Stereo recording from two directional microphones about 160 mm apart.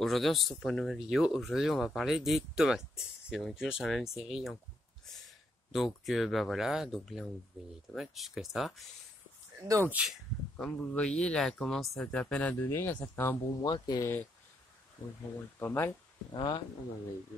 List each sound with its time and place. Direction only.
0.0 s speech: centre (ahead or behind)
5.0 s a sound: centre (ahead or behind)
6.0 s speech: centre (ahead or behind)
9.6 s speech: 15° right (ahead or behind); by 14.0 s 25° left (ahead or behind)
15.6 s speech: 15° left (ahead or behind)
16.3 s speech: 30° left (ahead or behind)